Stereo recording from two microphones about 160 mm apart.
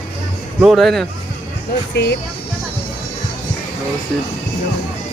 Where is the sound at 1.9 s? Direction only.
90° left.